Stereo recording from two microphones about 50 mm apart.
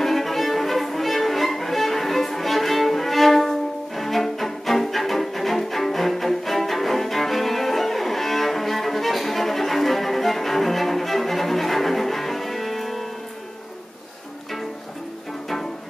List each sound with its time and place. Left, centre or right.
0.0 s violin: centre